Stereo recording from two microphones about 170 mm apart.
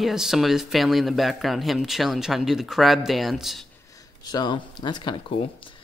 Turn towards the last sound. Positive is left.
turn(degrees=25)  # may be behind; listen again after turning